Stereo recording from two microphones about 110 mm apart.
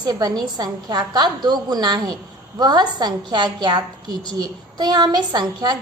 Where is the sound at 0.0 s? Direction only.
35° right (ahead or behind).